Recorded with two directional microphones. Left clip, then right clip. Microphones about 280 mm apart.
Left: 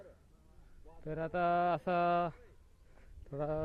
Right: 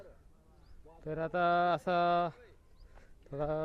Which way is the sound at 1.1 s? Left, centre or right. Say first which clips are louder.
Right 2 dB; centre.